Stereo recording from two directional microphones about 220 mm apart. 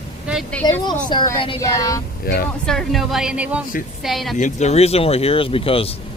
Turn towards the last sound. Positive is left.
turn(degrees=25)  # may be behind; listen again after turning